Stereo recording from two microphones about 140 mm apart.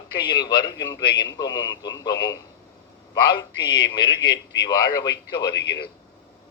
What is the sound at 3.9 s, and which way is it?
A man's voice, 35° left (ahead or behind).